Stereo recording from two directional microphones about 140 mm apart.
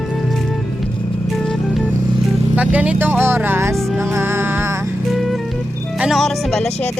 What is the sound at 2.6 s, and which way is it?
Vehicle, 10° right (ahead or behind).